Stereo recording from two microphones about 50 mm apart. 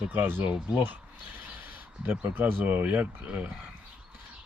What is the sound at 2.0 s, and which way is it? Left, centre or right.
Speech, right.